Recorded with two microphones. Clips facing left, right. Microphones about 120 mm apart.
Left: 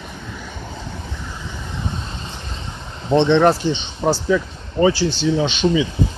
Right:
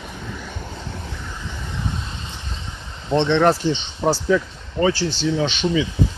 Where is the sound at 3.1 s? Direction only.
10° left (ahead or behind).